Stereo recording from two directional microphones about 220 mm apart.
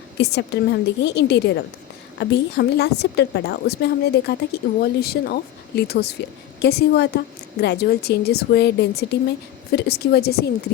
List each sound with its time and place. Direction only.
0.2 s a woman's voice: 50° left (ahead or behind)